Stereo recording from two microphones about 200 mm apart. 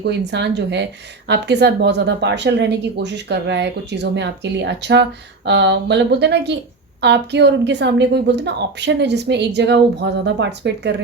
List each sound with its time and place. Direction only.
0.0 s a woman's voice: 60° right (ahead or behind)